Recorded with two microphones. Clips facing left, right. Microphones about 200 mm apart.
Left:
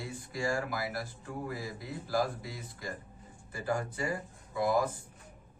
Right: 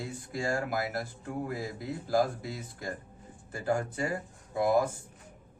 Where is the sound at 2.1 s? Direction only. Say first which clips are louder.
Right 4 dB; 50° right (ahead or behind).